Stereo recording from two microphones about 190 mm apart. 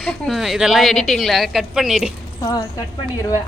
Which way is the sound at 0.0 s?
Centre (ahead or behind).